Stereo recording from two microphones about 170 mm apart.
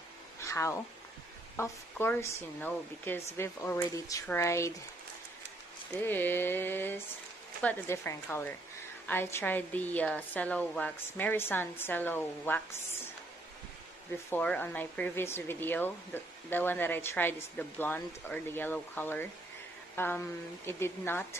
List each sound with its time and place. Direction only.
0.4 s cat: 15° left (ahead or behind)
1.6 s speech: 15° left (ahead or behind)
6.0 s speech: 10° left (ahead or behind)
14.3 s speech: 10° left (ahead or behind)